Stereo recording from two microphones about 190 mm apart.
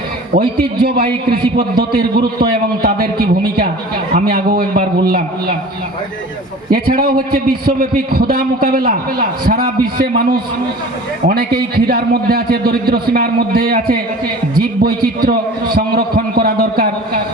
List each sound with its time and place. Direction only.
0.3 s a man's voice: 50° right (ahead or behind)
6.7 s a man's voice: 50° right (ahead or behind)